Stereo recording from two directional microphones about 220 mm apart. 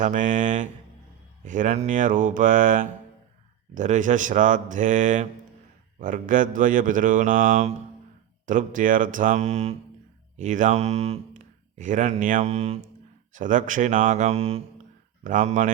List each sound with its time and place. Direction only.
0.0 s speech: 35° right (ahead or behind)